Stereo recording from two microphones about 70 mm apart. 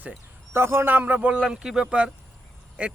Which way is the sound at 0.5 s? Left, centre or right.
Right.